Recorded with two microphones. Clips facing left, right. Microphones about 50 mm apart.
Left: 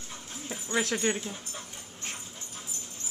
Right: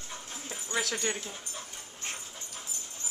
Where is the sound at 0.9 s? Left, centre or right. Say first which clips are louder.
Left 4 dB; centre.